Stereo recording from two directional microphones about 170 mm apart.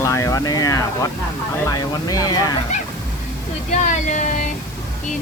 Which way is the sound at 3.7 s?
45° left (ahead or behind).